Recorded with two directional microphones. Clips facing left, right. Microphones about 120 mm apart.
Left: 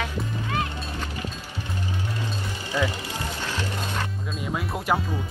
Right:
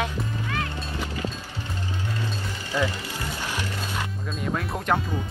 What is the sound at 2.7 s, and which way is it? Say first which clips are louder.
Music: even; 15° left (ahead or behind).